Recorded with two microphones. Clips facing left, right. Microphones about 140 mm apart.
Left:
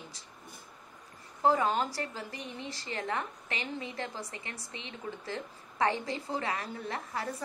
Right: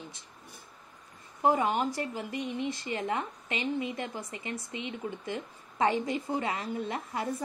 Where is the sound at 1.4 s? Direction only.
15° right (ahead or behind).